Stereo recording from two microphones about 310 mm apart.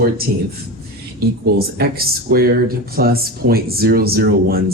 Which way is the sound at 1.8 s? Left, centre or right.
Right.